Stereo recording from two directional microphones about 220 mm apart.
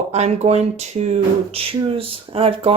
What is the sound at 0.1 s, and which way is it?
Speech, 30° right (ahead or behind).